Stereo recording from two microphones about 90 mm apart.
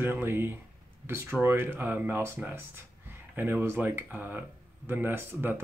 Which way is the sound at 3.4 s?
25° right (ahead or behind).